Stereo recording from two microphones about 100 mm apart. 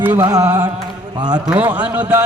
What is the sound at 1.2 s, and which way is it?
Music, 45° right (ahead or behind).